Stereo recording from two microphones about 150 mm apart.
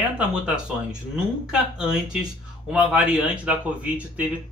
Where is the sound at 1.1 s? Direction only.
5° right (ahead or behind).